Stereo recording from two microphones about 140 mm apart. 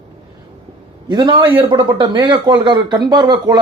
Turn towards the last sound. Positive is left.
turn(degrees=-30)  # may be behind; listen again after turning